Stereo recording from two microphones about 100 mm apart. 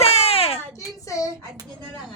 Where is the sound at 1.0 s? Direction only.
35° left (ahead or behind).